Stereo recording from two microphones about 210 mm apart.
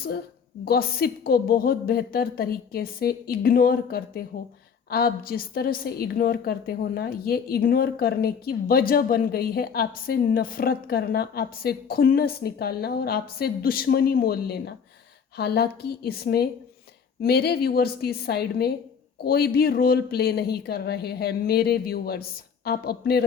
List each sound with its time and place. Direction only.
0.6 s a woman's voice: 45° left (ahead or behind)